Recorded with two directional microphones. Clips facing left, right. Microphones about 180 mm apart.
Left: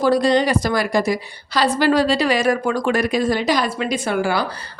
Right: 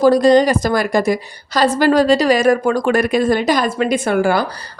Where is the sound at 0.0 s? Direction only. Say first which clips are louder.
Right 5 dB; 45° right (ahead or behind).